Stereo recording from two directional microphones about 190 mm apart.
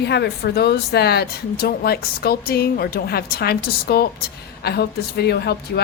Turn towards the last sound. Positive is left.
turn(degrees=60)  # may be behind; listen again after turning